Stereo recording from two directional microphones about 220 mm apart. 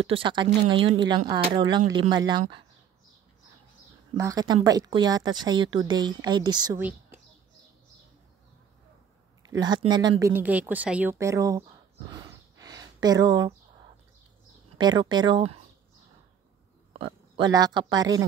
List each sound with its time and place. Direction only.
0.0 s a woman's voice: 25° right (ahead or behind)
4.2 s a woman's voice: 15° right (ahead or behind)
6.8 s a woman's voice: 5° right (ahead or behind)
9.6 s a woman's voice: 20° right (ahead or behind)
10.2 s speech: 10° right (ahead or behind)
12.1 s a sound: 15° right (ahead or behind)
14.8 s a woman's voice: 20° right (ahead or behind)
16.9 s speech: 20° right (ahead or behind)